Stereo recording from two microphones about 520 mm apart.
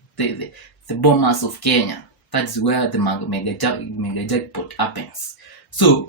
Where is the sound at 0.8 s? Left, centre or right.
Left.